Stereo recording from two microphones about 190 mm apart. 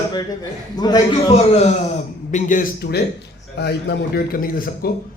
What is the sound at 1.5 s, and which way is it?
A man's voice, 35° left (ahead or behind).